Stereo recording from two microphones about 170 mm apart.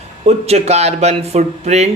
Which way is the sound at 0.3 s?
40° right (ahead or behind).